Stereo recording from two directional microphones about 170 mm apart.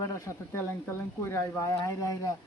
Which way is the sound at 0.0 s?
15° left (ahead or behind).